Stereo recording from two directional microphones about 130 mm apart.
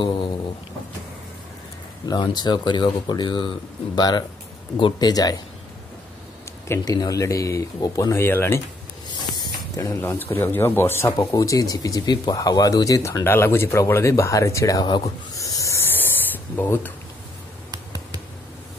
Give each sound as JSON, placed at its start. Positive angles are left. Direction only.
{"t": 2.0, "sound": "speech", "side_deg": 35}
{"t": 6.7, "sound": "speech", "side_deg": 30}
{"t": 8.1, "sound": "speech", "side_deg": 20}
{"t": 9.1, "sound": "a sound", "side_deg": 35}
{"t": 9.9, "sound": "speech", "side_deg": 15}